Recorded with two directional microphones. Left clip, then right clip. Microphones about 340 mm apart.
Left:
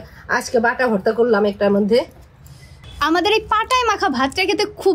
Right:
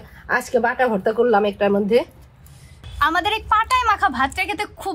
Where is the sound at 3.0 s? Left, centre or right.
Centre.